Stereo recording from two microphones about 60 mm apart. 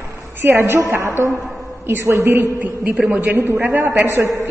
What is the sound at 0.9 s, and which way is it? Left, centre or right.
A woman's voice, right.